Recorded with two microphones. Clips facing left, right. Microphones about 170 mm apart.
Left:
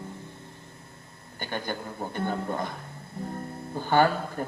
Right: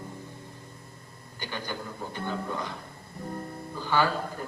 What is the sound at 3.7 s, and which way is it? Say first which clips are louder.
Music: left 4 dB; 50° left (ahead or behind).